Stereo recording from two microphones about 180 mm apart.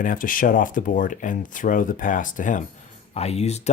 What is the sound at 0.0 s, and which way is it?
Speech, 50° left (ahead or behind).